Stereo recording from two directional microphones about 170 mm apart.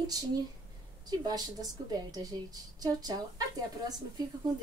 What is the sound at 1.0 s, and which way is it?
Speech, 25° right (ahead or behind).